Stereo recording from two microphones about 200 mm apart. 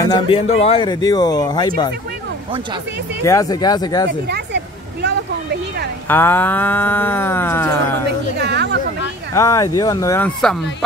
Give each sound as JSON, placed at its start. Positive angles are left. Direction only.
{"t": 0.0, "sound": "speech", "side_deg": 20}
{"t": 0.5, "sound": "speech", "side_deg": 30}
{"t": 3.3, "sound": "speech", "side_deg": 15}
{"t": 6.0, "sound": "moo", "side_deg": 10}
{"t": 8.4, "sound": "speech", "side_deg": -55}
{"t": 9.3, "sound": "moo", "side_deg": 15}